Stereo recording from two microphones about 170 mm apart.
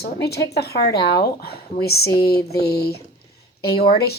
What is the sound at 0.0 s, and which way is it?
Speech, 70° left (ahead or behind).